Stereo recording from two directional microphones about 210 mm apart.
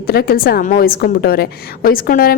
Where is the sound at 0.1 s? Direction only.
45° left (ahead or behind).